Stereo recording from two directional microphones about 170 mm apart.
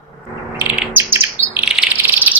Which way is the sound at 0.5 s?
10° right (ahead or behind).